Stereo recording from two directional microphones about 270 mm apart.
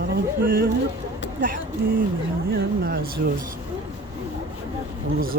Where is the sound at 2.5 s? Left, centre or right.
Right.